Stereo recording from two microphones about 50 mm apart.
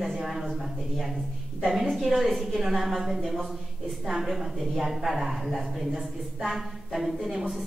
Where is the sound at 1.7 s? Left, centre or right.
Centre.